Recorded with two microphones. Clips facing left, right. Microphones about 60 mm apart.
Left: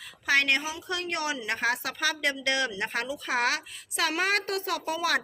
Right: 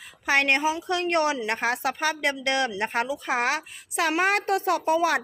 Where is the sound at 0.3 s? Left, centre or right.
Right.